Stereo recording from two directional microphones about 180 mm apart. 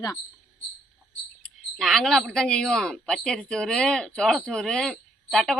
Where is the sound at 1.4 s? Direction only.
5° left (ahead or behind).